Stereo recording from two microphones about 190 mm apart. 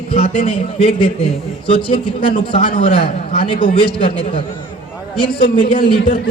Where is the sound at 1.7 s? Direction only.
25° left (ahead or behind).